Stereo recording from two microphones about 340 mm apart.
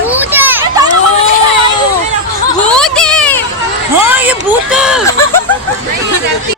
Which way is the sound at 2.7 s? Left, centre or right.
Centre.